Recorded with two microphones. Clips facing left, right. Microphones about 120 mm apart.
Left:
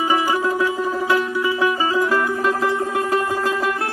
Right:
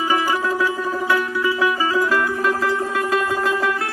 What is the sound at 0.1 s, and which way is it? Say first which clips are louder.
Music: even; 20° left (ahead or behind).